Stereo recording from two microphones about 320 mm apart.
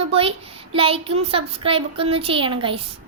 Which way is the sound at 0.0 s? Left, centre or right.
Centre.